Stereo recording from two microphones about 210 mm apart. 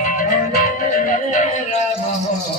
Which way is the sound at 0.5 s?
45° left (ahead or behind).